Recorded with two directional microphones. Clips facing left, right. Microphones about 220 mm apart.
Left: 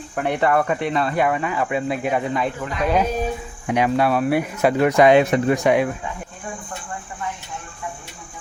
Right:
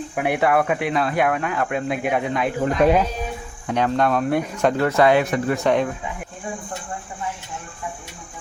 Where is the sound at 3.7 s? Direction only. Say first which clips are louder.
Left 1 dB; 10° left (ahead or behind).